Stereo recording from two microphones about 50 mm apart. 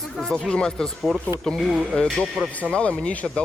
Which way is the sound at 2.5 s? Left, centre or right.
Left.